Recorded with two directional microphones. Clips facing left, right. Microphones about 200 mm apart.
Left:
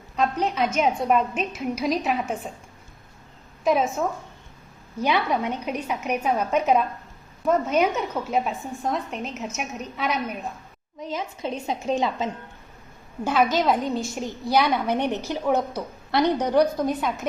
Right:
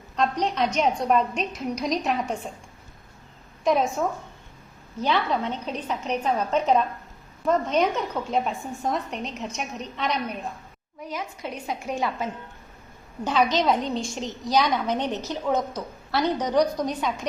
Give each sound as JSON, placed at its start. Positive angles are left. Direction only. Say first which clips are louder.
{"t": 0.2, "sound": "a woman's voice", "louder": "left 1 dB", "side_deg": 5}
{"t": 3.6, "sound": "a woman's voice", "louder": "left 1 dB", "side_deg": 5}
{"t": 11.0, "sound": "a woman's voice", "louder": "left 3 dB", "side_deg": 25}
{"t": 13.2, "sound": "a woman's voice", "louder": "left 1 dB", "side_deg": 5}